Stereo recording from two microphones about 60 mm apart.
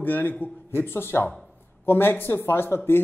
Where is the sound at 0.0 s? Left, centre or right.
Left.